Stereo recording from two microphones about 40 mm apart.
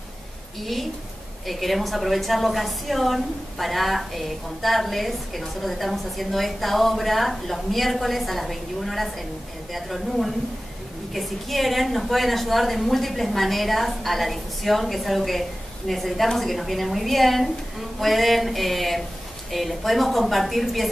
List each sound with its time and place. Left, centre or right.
0.6 s a woman's voice: centre